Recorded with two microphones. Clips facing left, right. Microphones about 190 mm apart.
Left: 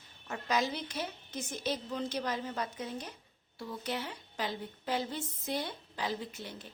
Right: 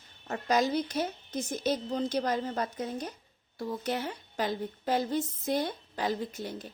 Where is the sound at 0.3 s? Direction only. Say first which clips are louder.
Right 5 dB; 40° right (ahead or behind).